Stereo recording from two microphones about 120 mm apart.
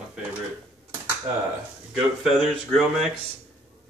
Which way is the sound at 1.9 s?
Centre (ahead or behind).